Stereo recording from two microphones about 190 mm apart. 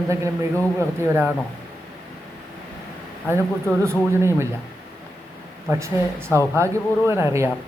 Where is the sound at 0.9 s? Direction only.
15° right (ahead or behind).